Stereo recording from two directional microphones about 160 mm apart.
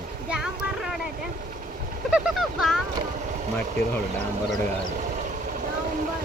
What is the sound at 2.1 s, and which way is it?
Speech, 5° right (ahead or behind).